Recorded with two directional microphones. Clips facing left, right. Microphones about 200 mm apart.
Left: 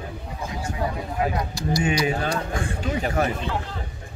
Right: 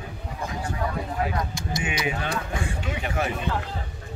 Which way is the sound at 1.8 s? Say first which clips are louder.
Left 5 dB; 40° left (ahead or behind).